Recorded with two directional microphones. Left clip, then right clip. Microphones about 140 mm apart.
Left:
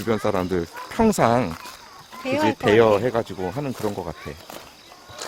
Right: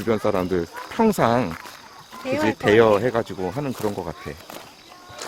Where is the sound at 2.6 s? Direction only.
5° left (ahead or behind).